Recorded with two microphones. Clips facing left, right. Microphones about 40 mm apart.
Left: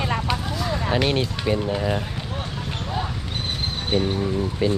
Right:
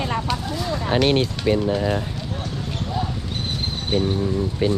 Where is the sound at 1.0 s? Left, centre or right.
Right.